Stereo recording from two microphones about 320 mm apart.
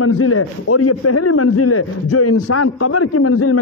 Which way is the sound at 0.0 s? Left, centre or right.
Left.